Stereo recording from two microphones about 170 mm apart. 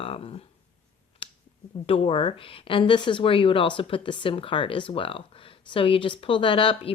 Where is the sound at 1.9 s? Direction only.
35° left (ahead or behind).